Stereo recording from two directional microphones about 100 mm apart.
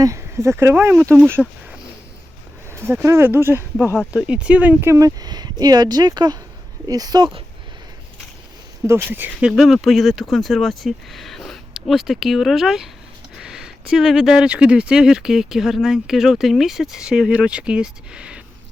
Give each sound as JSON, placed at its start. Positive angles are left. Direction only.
{"t": 0.0, "sound": "speech", "side_deg": -30}
{"t": 1.4, "sound": "speech", "side_deg": 0}
{"t": 2.7, "sound": "speech", "side_deg": -25}
{"t": 4.1, "sound": "speech", "side_deg": -10}
{"t": 4.9, "sound": "speech", "side_deg": -35}
{"t": 8.9, "sound": "speech", "side_deg": -25}
{"t": 9.5, "sound": "speech", "side_deg": 0}